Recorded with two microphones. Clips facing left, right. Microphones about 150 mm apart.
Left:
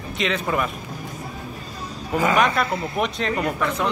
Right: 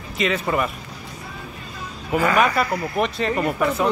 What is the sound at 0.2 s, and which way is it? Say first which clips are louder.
Speech: right 2 dB; centre (ahead or behind).